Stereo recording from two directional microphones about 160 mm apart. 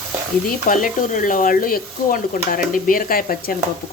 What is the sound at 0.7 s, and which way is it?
Frying, 55° left (ahead or behind).